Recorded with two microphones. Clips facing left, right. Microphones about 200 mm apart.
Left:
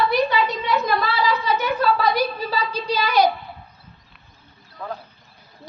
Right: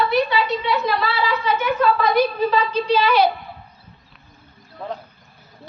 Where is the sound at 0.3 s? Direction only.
45° left (ahead or behind).